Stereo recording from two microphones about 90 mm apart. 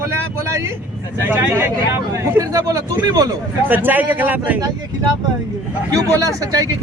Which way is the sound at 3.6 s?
20° right (ahead or behind).